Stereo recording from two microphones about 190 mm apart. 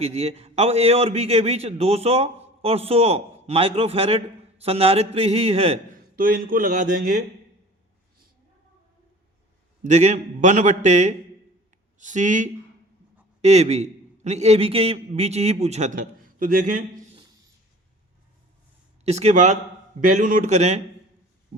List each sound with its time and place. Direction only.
0.0 s a man's voice: 35° right (ahead or behind)
6.1 s speech: 50° right (ahead or behind)
9.8 s a man's voice: 40° right (ahead or behind)
19.0 s a man's voice: 35° right (ahead or behind)